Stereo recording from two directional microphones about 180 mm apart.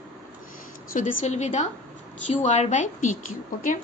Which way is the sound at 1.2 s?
40° left (ahead or behind).